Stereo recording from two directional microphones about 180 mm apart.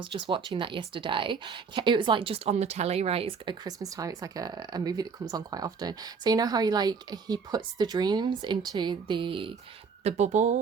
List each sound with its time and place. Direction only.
0.0 s speech: 25° right (ahead or behind)
10.0 s speech: 35° right (ahead or behind)